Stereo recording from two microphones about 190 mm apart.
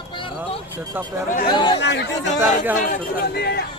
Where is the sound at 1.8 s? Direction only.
65° left (ahead or behind).